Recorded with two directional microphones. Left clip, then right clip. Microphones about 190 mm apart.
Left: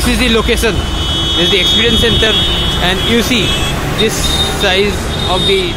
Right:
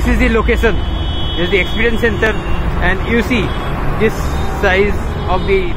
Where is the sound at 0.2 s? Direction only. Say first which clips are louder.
Even; 15° left (ahead or behind).